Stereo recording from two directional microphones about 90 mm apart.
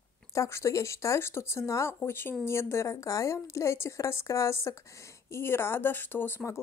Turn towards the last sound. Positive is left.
turn(degrees=25)  # may be behind; listen again after turning